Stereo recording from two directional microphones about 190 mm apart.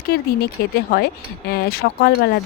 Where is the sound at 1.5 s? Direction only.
55° left (ahead or behind).